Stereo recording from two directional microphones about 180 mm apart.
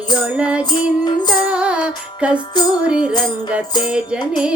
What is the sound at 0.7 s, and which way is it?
Music, 25° left (ahead or behind).